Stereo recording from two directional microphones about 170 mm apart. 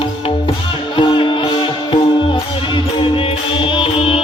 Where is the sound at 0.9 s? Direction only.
30° left (ahead or behind).